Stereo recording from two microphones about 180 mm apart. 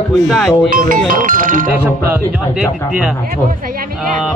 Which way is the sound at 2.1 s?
5° right (ahead or behind).